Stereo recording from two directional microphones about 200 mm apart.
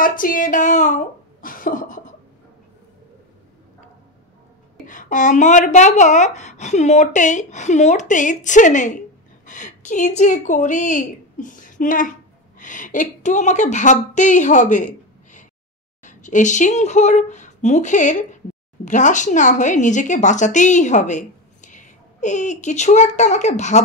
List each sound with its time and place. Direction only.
0.0 s speech: 45° left (ahead or behind)
4.8 s a woman's voice: 40° left (ahead or behind)